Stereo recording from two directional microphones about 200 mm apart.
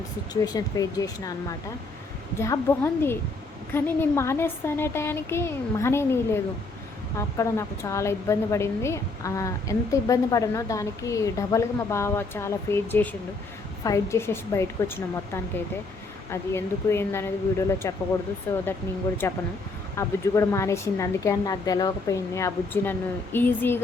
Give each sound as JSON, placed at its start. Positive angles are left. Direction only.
{"t": 0.4, "sound": "a woman's voice", "side_deg": 20}
{"t": 2.4, "sound": "a woman's voice", "side_deg": 15}